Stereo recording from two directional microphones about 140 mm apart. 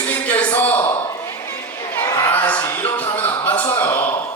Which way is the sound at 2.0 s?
20° left (ahead or behind).